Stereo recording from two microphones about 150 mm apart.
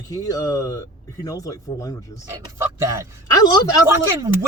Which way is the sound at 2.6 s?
20° right (ahead or behind).